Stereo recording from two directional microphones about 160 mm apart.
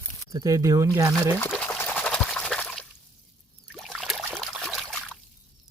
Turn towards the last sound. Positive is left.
turn(degrees=0)  # may be behind; listen again after turning